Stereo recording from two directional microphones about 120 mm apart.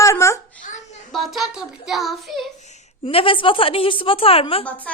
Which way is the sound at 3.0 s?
50° left (ahead or behind).